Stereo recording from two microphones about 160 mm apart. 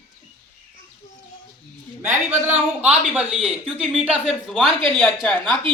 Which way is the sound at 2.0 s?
15° right (ahead or behind).